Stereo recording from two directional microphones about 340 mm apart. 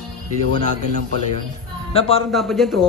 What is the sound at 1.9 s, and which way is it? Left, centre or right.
Speech, centre.